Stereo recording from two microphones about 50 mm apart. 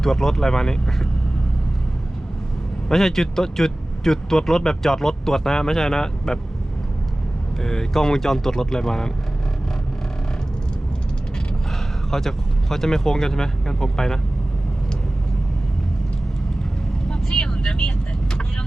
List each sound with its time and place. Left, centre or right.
0.0 s a man's voice: centre
2.9 s a man's voice: centre
7.6 s a man's voice: centre
12.1 s a man's voice: centre
17.1 s vehicle: centre